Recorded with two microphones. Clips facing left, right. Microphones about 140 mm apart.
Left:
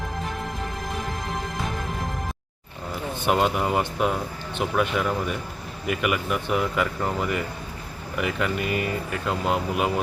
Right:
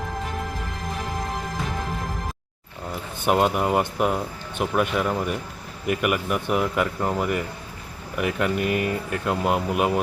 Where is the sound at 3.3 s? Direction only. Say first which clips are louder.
Right 2 dB; centre (ahead or behind).